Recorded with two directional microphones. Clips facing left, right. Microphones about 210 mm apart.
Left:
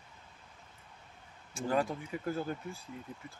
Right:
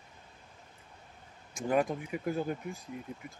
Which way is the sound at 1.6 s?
15° right (ahead or behind).